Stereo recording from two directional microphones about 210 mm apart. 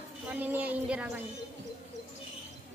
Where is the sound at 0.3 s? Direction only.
10° right (ahead or behind).